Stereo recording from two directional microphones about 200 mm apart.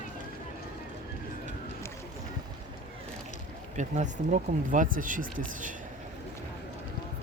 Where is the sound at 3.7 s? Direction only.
35° right (ahead or behind).